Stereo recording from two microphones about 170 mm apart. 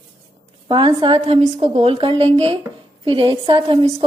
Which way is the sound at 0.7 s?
30° right (ahead or behind).